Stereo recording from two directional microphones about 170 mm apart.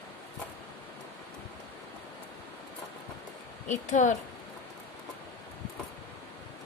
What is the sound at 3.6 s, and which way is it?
Speech, 45° left (ahead or behind).